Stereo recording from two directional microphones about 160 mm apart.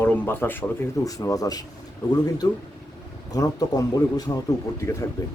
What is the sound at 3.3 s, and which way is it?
Speech, 20° left (ahead or behind).